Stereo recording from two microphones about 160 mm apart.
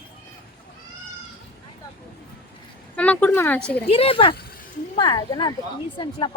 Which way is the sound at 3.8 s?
35° left (ahead or behind).